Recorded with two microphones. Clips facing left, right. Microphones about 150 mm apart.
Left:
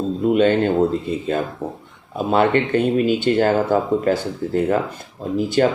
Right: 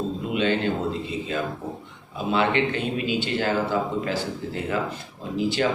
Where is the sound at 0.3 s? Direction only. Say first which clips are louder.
Left 9 dB; 45° left (ahead or behind).